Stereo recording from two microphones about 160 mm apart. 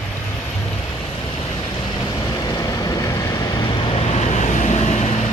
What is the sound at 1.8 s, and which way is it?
Vehicle, 25° left (ahead or behind).